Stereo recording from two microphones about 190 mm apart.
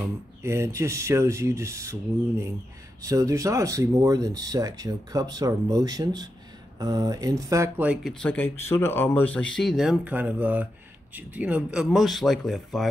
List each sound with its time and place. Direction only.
0.4 s speech: 15° right (ahead or behind); by 12.8 s centre (ahead or behind)